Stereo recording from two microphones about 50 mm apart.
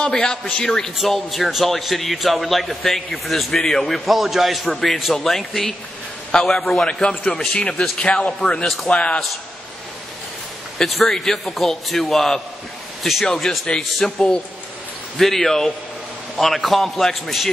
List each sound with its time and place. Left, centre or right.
0.0 s a man's voice: centre
7.7 s a man's voice: centre
8.3 s speech: centre
10.8 s a man's voice: centre